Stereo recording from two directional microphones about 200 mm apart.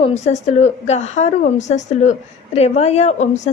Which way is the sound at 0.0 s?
35° left (ahead or behind).